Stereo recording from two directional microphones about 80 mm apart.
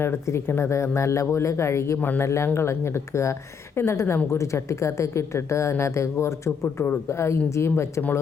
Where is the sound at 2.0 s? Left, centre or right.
Left.